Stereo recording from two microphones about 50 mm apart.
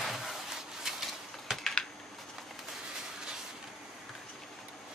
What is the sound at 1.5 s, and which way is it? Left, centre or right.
Typing, centre.